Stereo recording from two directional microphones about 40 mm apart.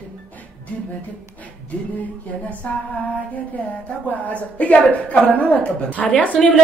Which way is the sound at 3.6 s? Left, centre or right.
Left.